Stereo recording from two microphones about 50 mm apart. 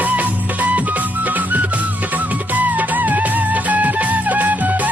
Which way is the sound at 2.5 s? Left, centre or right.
Right.